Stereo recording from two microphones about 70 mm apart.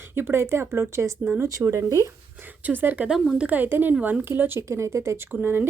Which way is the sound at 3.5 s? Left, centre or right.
Right.